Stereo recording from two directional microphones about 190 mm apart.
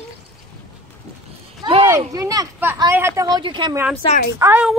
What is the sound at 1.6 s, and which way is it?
A woman's voice, 20° right (ahead or behind).